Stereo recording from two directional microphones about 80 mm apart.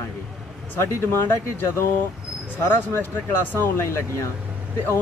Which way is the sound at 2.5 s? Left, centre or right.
Left.